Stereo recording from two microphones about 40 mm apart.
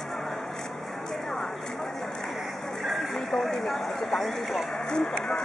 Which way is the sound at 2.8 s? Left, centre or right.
Centre.